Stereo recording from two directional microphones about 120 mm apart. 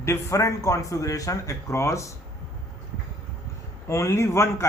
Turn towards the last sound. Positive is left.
turn(degrees=25)  # may be behind; listen again after turning